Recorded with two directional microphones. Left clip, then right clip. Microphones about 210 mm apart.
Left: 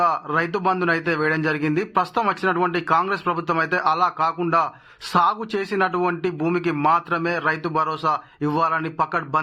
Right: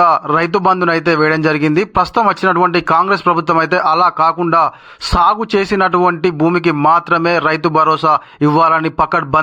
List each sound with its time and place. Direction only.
0.0 s speech: 35° right (ahead or behind)